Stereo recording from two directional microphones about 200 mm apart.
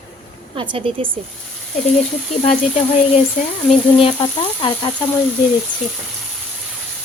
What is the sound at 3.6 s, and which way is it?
Frying, 30° left (ahead or behind).